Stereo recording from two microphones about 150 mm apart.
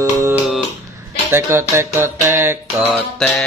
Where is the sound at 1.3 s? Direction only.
15° right (ahead or behind).